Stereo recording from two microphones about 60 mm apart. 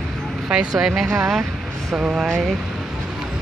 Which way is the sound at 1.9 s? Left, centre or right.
Centre.